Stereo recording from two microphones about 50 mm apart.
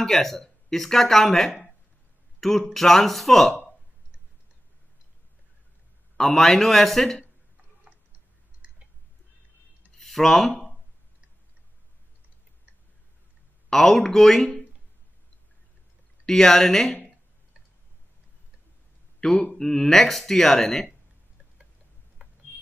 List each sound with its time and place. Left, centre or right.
0.0 s speech: centre
6.1 s speech: centre
9.9 s a sound: centre
13.7 s speech: centre
16.3 s speech: centre
19.1 s speech: centre
22.2 s a sound: right